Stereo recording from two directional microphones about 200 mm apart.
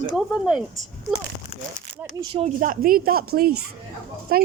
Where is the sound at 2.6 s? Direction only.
45° right (ahead or behind).